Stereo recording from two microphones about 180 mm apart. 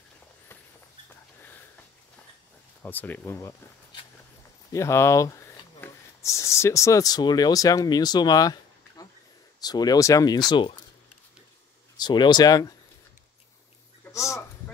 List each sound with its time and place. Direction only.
2.8 s speech: 10° left (ahead or behind)
4.7 s speech: 15° left (ahead or behind)
12.0 s speech: 25° left (ahead or behind)
14.1 s speech: 15° left (ahead or behind)